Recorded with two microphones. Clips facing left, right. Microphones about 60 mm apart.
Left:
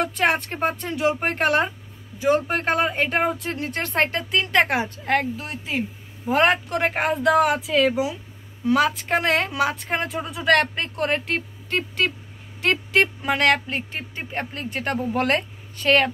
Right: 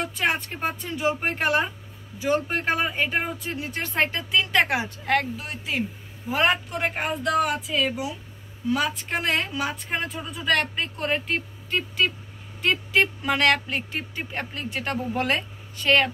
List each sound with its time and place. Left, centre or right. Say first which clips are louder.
0.0 s music: left 4 dB; left
0.7 s speech: left 3 dB; left
2.2 s speech: left 4 dB; left
2.5 s a man's voice: left 3 dB; left
7.0 s speech: left 5 dB; left
10.3 s speech: left 5 dB; left
10.7 s speech: left 3 dB; left
13.0 s speech: even; left
15.1 s a woman's voice: left 4 dB; left